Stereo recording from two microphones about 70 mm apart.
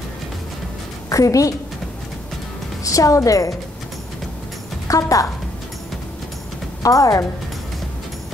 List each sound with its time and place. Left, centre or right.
1.1 s a woman's voice: left
2.8 s a woman's voice: left
4.8 s a woman's voice: left
6.8 s a woman's voice: left